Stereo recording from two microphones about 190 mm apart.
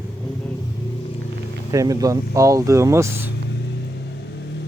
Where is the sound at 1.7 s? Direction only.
15° right (ahead or behind).